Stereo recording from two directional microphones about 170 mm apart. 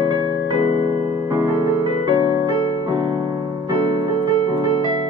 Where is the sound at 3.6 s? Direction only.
30° right (ahead or behind).